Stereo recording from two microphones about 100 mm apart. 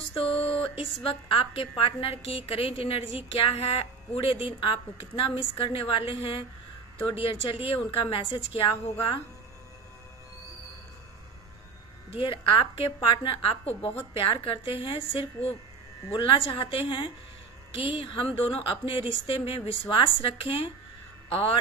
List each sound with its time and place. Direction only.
0.1 s a woman's voice: 70° left (ahead or behind)
12.2 s a woman's voice: 60° left (ahead or behind)